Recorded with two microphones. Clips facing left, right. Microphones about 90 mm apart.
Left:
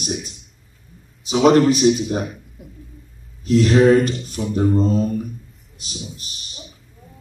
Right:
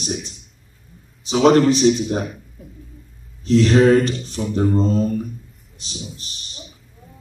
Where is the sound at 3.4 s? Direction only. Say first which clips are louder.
Even; 35° right (ahead or behind).